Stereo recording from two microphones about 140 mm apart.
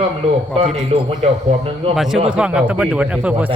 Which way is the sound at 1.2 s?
50° right (ahead or behind).